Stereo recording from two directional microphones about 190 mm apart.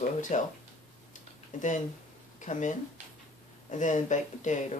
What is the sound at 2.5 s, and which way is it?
Speech, 40° left (ahead or behind).